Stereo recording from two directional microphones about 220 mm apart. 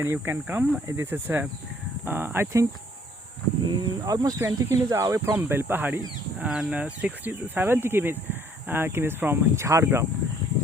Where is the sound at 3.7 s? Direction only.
15° right (ahead or behind).